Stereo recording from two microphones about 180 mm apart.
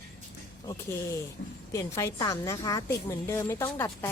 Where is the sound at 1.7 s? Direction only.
15° left (ahead or behind).